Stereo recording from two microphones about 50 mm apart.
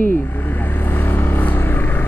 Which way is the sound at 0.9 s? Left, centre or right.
Left.